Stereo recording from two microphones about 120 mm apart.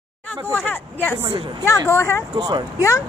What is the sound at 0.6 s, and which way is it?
Speech, 15° left (ahead or behind).